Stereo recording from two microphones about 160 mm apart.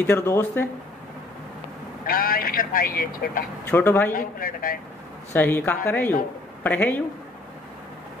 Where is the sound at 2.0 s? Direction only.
65° left (ahead or behind).